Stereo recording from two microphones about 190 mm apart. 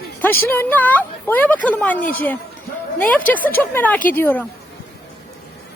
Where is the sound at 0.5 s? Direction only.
10° left (ahead or behind).